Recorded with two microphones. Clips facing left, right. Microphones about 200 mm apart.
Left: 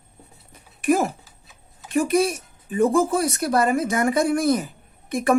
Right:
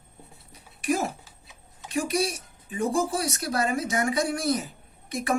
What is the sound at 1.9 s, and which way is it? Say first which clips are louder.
A woman's voice: left 7 dB; 50° left (ahead or behind).